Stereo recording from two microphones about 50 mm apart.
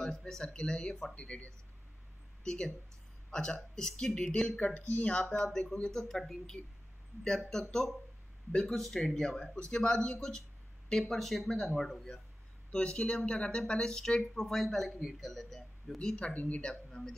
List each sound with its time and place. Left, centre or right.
0.0 s speech: centre
2.4 s speech: centre
12.7 s speech: left; by 16.0 s centre
16.0 s speech: centre
17.0 s speech: centre